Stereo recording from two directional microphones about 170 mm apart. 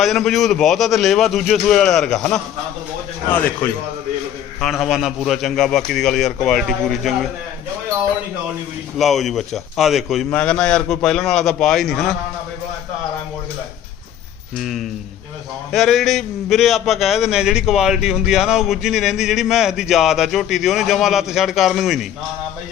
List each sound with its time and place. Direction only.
0.0 s a man's voice: centre (ahead or behind)
4.6 s a man's voice: centre (ahead or behind)
9.0 s a man's voice: centre (ahead or behind)
14.6 s a man's voice: centre (ahead or behind)